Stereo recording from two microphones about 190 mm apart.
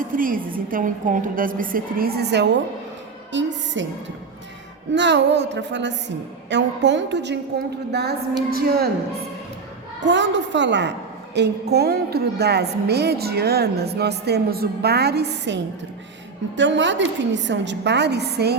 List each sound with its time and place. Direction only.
0.0 s a woman's voice: 45° right (ahead or behind); by 3.9 s 70° right (ahead or behind)
4.9 s a woman's voice: 65° right (ahead or behind)
8.5 s a woman's voice: 55° right (ahead or behind)
10.0 s a woman's voice: 70° right (ahead or behind)